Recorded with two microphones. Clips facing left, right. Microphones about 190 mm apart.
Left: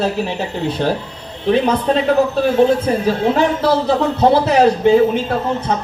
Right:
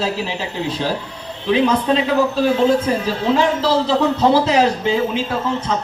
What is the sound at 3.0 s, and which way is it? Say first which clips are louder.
Speech: left 2 dB; 55° left (ahead or behind).